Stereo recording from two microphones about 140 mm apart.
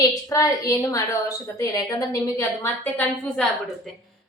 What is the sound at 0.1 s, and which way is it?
A woman's voice, 25° left (ahead or behind).